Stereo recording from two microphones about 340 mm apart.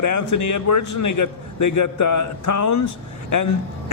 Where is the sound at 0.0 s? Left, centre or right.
Left.